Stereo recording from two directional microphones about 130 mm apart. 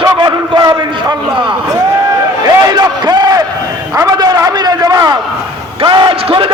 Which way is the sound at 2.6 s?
30° right (ahead or behind).